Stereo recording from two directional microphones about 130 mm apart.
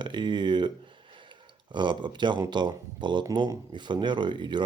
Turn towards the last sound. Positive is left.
turn(degrees=-35)  # may be behind; listen again after turning